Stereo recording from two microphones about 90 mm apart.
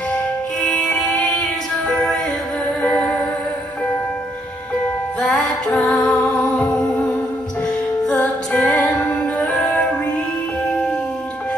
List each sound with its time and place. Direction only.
0.1 s music: 15° left (ahead or behind)
2.8 s music: 15° left (ahead or behind)
5.2 s music: 5° left (ahead or behind)
8.1 s music: 15° left (ahead or behind)